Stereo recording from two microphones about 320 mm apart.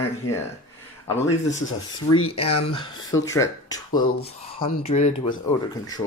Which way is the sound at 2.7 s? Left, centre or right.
Centre.